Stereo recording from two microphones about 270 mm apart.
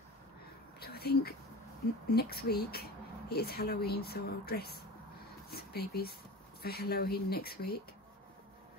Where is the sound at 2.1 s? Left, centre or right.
Left.